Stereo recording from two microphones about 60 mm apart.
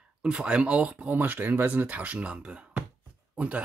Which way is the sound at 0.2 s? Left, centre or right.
Centre.